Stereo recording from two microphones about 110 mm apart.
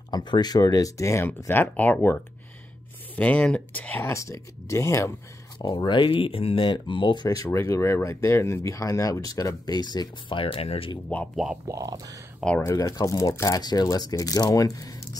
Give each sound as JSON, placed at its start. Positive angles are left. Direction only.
{"t": 0.1, "sound": "speech", "side_deg": 40}
{"t": 5.9, "sound": "speech", "side_deg": 50}
{"t": 7.4, "sound": "speech", "side_deg": 25}
{"t": 10.4, "sound": "speech", "side_deg": 60}
{"t": 11.1, "sound": "speech", "side_deg": 15}
{"t": 11.6, "sound": "speech", "side_deg": -35}
{"t": 12.4, "sound": "speech", "side_deg": 0}
{"t": 12.7, "sound": "speech", "side_deg": 35}